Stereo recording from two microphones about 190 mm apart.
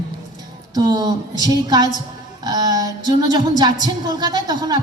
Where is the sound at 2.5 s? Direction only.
20° right (ahead or behind).